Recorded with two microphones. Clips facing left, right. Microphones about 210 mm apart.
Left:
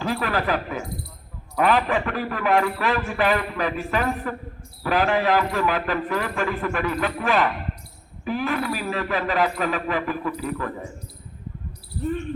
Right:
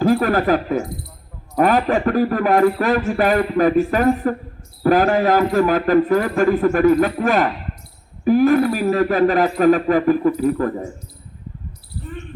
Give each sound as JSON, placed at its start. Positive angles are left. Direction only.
{"t": 0.0, "sound": "a man's voice", "side_deg": -45}